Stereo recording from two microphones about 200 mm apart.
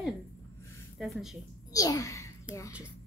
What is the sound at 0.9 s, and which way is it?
Speech, centre (ahead or behind).